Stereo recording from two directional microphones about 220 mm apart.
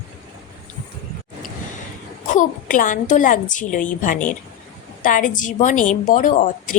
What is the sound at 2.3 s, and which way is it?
Speech, 35° left (ahead or behind).